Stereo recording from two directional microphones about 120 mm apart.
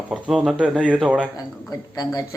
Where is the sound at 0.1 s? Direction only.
5° right (ahead or behind).